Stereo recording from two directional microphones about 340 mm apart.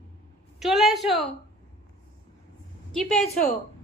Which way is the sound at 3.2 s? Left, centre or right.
Centre.